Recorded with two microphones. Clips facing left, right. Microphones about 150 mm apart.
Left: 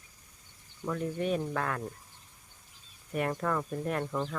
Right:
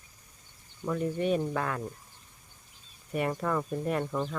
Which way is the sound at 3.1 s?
5° right (ahead or behind).